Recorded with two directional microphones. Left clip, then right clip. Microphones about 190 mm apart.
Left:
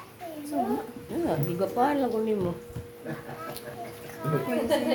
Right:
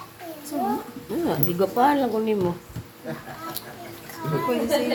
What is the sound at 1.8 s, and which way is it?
Speech, 20° right (ahead or behind).